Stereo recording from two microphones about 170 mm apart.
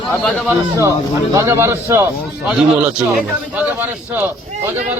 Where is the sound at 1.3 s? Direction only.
20° right (ahead or behind).